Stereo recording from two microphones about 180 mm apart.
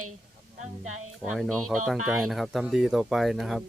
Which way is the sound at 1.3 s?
Centre (ahead or behind).